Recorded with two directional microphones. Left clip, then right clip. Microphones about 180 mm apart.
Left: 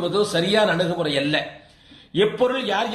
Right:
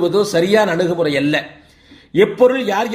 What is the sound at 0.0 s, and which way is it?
A man's voice, 45° right (ahead or behind).